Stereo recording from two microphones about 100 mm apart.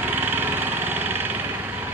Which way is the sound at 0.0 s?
20° right (ahead or behind).